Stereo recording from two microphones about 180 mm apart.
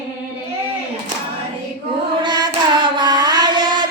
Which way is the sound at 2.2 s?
25° right (ahead or behind).